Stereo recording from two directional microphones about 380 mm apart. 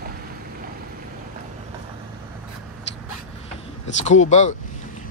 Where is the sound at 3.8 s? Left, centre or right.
Centre.